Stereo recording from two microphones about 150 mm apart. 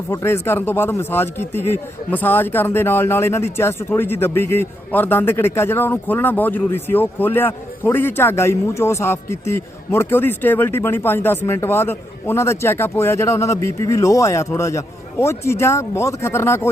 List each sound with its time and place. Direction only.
0.1 s a man's voice: 15° left (ahead or behind)